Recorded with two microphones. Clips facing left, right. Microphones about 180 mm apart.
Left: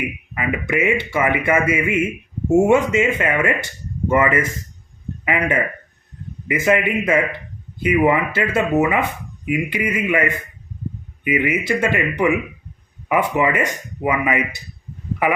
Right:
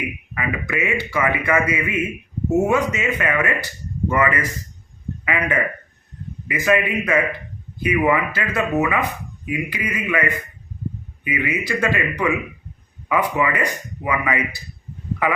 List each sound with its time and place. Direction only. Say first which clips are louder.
0.3 s a man's voice: left 4 dB; 25° left (ahead or behind)